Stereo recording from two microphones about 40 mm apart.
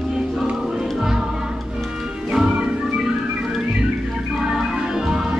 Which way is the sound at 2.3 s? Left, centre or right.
Centre.